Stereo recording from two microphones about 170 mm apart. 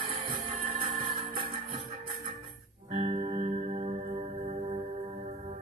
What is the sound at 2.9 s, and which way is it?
Music, 40° right (ahead or behind).